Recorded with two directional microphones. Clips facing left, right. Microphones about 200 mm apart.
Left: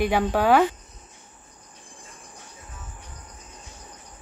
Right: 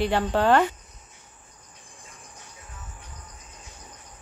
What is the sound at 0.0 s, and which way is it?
Speech, 10° left (ahead or behind).